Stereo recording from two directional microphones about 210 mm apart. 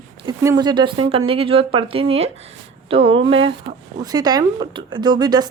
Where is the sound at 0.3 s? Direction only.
20° right (ahead or behind).